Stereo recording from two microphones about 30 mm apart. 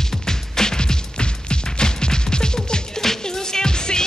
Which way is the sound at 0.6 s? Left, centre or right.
Left.